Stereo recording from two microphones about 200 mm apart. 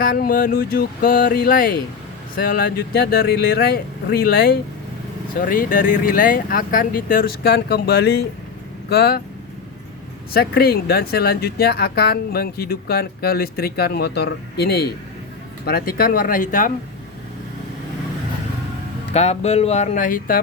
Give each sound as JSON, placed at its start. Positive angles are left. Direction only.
{"t": 0.0, "sound": "speech", "side_deg": 45}
{"t": 10.3, "sound": "speech", "side_deg": 50}
{"t": 19.1, "sound": "speech", "side_deg": 35}